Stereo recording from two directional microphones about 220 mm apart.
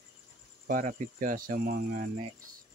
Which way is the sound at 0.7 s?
40° right (ahead or behind).